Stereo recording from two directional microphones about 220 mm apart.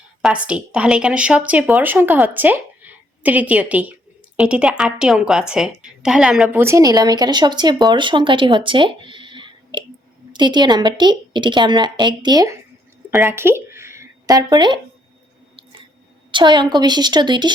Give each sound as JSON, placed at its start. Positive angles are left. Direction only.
{"t": 0.2, "sound": "a woman's voice", "side_deg": -5}
{"t": 13.1, "sound": "a sound", "side_deg": -10}
{"t": 16.3, "sound": "a woman's voice", "side_deg": -20}